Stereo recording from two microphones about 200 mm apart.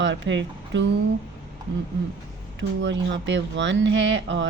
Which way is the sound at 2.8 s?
65° right (ahead or behind).